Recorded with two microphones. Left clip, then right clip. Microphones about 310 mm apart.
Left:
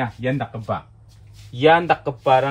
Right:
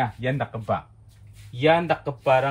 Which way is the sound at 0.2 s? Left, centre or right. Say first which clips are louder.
Left 2 dB; centre.